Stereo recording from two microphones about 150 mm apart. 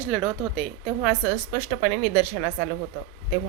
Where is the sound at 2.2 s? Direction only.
10° right (ahead or behind).